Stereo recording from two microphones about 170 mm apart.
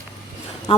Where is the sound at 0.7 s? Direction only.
30° left (ahead or behind).